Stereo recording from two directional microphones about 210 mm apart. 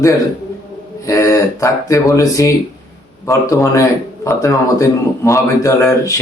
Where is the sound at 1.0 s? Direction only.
15° left (ahead or behind).